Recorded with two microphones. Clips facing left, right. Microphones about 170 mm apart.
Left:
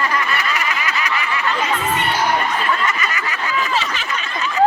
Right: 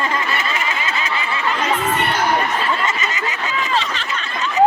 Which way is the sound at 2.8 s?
25° right (ahead or behind).